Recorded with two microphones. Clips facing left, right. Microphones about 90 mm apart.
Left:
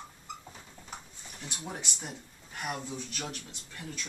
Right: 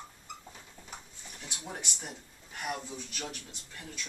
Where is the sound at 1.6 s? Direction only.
5° left (ahead or behind).